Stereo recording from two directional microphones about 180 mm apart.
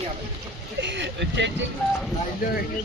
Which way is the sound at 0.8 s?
75° right (ahead or behind).